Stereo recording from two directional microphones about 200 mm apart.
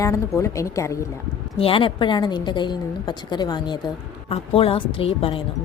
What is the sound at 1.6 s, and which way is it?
A woman's voice, 25° left (ahead or behind).